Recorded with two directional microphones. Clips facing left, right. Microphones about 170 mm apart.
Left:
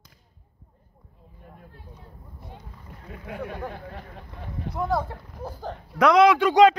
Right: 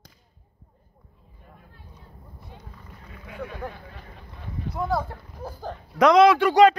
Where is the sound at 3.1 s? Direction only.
60° left (ahead or behind).